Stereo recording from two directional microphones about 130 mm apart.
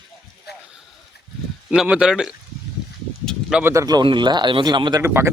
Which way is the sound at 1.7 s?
5° right (ahead or behind).